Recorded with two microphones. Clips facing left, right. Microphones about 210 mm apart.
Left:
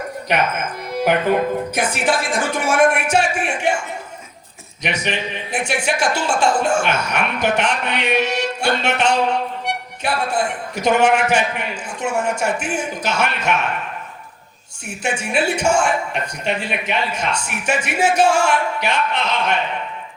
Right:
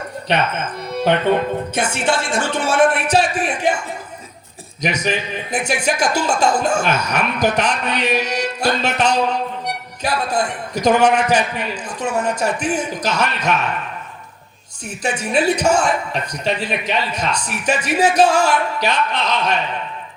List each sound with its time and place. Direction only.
0.3 s speech: 30° right (ahead or behind)
4.8 s speech: 40° right (ahead or behind)
14.8 s speech: 40° right (ahead or behind)